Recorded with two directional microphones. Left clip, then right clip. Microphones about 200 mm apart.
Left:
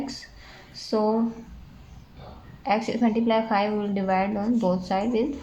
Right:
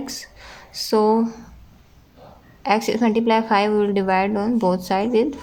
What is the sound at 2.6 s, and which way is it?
A woman's voice, 40° right (ahead or behind).